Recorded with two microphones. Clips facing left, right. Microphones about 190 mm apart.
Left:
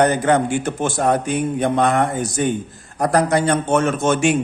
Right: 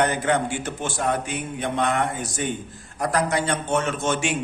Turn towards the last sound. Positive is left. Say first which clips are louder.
# left 7 dB
turn(degrees=50)  # may be behind; listen again after turning